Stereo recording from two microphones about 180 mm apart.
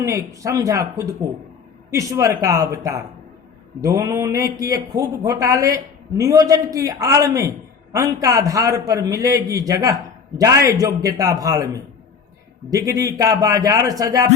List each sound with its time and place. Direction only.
0.0 s a man's voice: 15° right (ahead or behind)